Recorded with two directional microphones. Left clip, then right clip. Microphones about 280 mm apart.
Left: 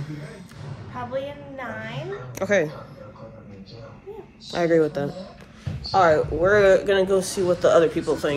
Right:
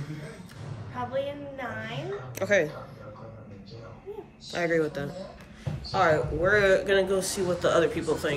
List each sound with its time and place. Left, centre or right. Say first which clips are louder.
0.9 s a man's voice: left 1 dB; centre
1.9 s speech: left 2 dB; centre
4.5 s speech: left 6 dB; centre
4.7 s a man's voice: left 7 dB; centre